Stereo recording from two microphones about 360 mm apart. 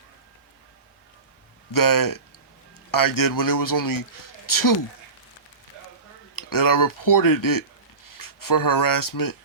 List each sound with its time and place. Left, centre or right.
1.7 s a man's voice: left
6.3 s a man's voice: left